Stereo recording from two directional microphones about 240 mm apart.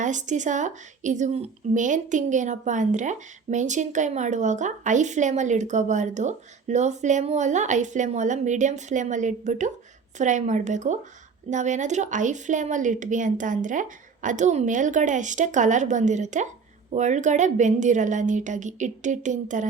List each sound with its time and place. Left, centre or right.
0.0 s a woman's voice: right